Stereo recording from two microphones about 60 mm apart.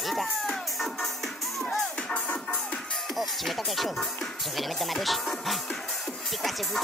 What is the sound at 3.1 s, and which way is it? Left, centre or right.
Music, centre.